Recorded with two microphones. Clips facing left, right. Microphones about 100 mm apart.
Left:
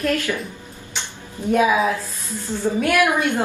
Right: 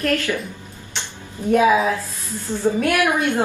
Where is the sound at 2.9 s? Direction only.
15° right (ahead or behind).